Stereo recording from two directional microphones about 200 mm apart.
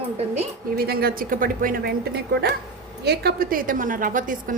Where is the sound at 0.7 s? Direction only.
50° right (ahead or behind).